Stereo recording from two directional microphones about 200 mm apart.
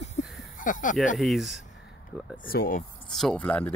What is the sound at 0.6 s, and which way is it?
Speech, 40° left (ahead or behind).